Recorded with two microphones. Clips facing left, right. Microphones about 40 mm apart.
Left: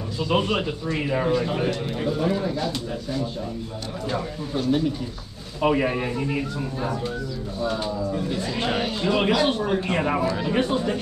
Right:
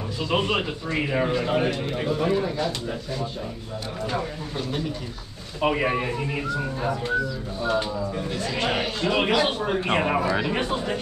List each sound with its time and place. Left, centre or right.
0.3 s a man's voice: centre
4.1 s a man's voice: centre
5.6 s a man's voice: centre